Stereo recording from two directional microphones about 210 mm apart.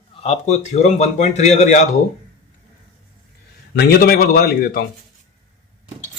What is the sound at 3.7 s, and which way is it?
A man's voice, 45° left (ahead or behind).